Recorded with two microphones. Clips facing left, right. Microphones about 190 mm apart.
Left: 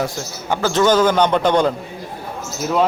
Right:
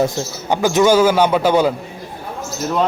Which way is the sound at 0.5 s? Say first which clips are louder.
Right 2 dB; 15° right (ahead or behind).